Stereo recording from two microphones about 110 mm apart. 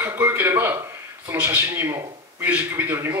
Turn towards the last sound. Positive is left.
turn(degrees=-15)  # may be behind; listen again after turning